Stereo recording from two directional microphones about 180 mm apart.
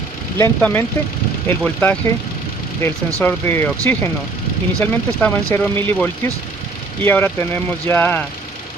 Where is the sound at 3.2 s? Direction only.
10° left (ahead or behind).